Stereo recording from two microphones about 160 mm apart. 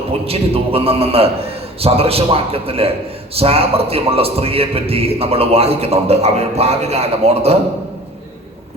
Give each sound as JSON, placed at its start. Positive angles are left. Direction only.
{"t": 0.3, "sound": "a man's voice", "side_deg": -35}